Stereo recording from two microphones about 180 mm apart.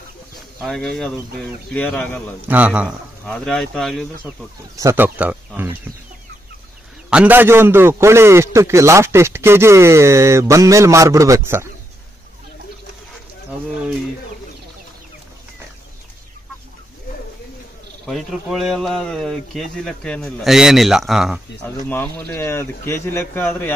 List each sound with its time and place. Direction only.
0.6 s speech: centre (ahead or behind)
2.4 s a man's voice: 10° right (ahead or behind)
3.3 s speech: 5° left (ahead or behind)
4.7 s a man's voice: 15° right (ahead or behind)
7.1 s a man's voice: 10° right (ahead or behind)
18.0 s speech: centre (ahead or behind)
21.8 s speech: 10° left (ahead or behind)